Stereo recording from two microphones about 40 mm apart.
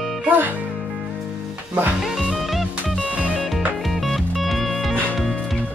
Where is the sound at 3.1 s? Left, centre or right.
Right.